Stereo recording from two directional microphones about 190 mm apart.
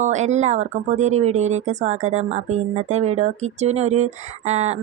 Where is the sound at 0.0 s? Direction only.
40° right (ahead or behind).